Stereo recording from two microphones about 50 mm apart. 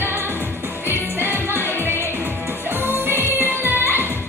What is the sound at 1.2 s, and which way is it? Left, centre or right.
Music, right.